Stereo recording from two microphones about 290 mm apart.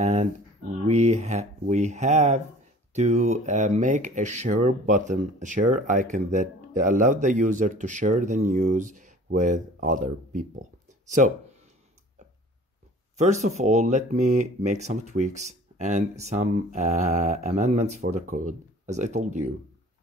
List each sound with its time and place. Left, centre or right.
0.0 s a sound: right
0.8 s speech: right
13.2 s speech: right